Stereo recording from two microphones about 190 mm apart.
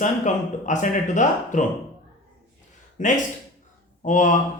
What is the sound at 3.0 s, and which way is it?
Speech, 40° left (ahead or behind).